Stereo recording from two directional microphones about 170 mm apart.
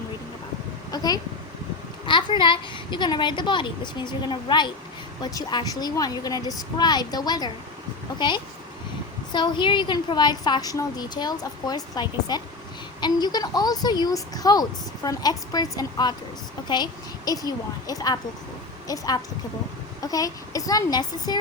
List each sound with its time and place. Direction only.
0.9 s a woman's voice: 20° left (ahead or behind)
9.3 s a woman's voice: 25° left (ahead or behind)